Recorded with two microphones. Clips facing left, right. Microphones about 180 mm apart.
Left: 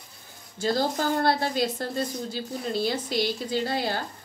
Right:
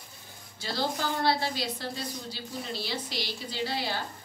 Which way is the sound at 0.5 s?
45° left (ahead or behind).